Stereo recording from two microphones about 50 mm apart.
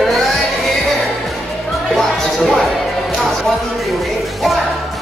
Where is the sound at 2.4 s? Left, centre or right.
Centre.